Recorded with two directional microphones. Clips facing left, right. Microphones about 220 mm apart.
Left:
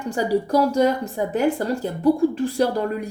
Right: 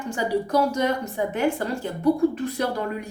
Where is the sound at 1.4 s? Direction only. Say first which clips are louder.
Left 5 dB; 35° left (ahead or behind).